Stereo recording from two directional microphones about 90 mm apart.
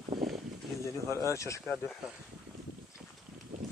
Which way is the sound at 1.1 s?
35° left (ahead or behind).